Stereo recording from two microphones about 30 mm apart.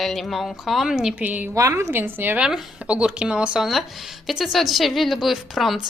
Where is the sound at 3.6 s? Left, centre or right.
Centre.